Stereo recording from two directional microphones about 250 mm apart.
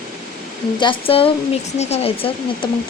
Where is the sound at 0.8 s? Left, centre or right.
Left.